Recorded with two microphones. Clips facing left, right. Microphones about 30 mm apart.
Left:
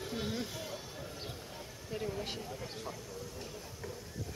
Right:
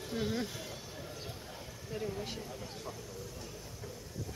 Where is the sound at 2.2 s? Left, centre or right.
Centre.